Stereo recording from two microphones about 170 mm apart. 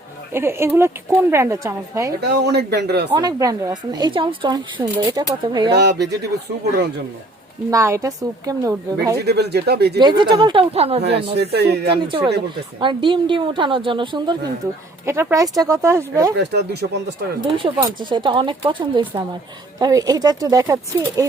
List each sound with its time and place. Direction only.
0.3 s speech: 15° right (ahead or behind)
2.2 s a man's voice: 75° right (ahead or behind)
3.2 s speech: 20° right (ahead or behind)
5.7 s speech: 85° right
7.7 s speech: 15° right (ahead or behind)
9.2 s a man's voice: 75° right (ahead or behind)
10.0 s speech: 25° right (ahead or behind)
11.3 s a man's voice: 75° right (ahead or behind)
11.9 s speech: 30° right (ahead or behind)
15.0 s speech: 15° right (ahead or behind)
16.4 s a man's voice: 75° right (ahead or behind)
17.4 s speech: 20° right (ahead or behind)